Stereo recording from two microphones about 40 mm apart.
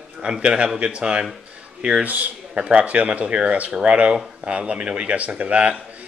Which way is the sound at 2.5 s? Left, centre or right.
Right.